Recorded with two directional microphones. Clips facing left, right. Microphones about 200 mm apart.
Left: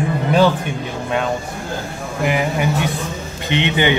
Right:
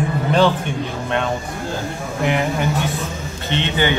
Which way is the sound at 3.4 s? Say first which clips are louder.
Left 3 dB; 15° left (ahead or behind).